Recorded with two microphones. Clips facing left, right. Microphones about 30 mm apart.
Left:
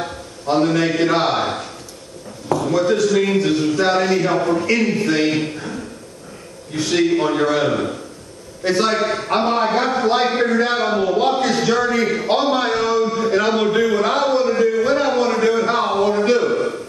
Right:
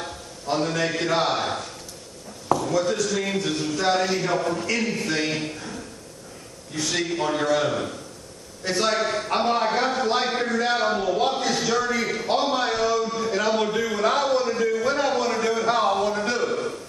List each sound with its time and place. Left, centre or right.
0.0 s a man's voice: left